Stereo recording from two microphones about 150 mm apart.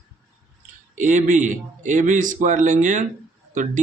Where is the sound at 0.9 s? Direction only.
55° right (ahead or behind).